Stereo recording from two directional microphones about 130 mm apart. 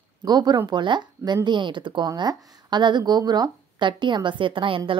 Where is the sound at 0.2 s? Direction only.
30° right (ahead or behind).